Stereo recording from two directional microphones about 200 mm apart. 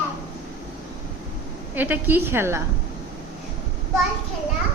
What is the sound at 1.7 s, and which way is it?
Speech, 10° right (ahead or behind).